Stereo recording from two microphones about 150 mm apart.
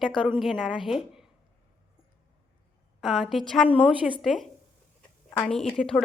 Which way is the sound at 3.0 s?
Centre (ahead or behind).